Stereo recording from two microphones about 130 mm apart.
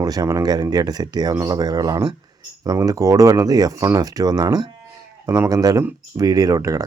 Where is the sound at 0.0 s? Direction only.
25° right (ahead or behind).